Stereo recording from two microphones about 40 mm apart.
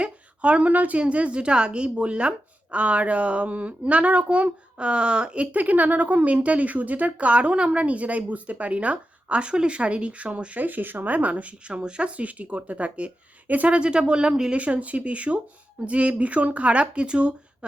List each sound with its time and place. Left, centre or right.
0.0 s a sound: right
0.9 s a woman's voice: right
5.5 s a woman's voice: right
10.6 s a woman's voice: right; by 14.5 s centre
14.5 s a woman's voice: right